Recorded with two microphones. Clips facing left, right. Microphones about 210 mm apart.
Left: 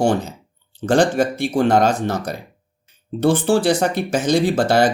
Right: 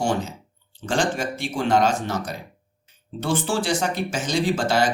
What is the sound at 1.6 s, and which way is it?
Speech, 60° left (ahead or behind).